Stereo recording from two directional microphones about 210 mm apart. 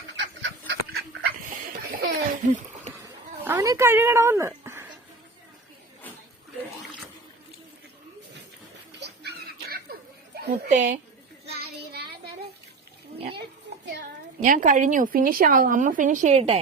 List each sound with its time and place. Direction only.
0.2 s chicken: 55° right (ahead or behind)
1.9 s a sound: 45° right (ahead or behind)
3.4 s speech: 10° right (ahead or behind)
9.0 s music: 55° right (ahead or behind)
10.3 s a sound: 50° right (ahead or behind)
10.7 s a woman's voice: 35° right (ahead or behind)
11.4 s child singing: 50° right (ahead or behind)
14.4 s a woman's voice: 40° right (ahead or behind)